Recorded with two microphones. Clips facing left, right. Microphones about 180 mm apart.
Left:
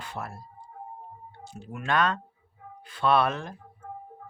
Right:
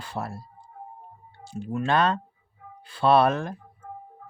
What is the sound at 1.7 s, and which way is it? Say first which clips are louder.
Speech: right 3 dB; 30° right (ahead or behind).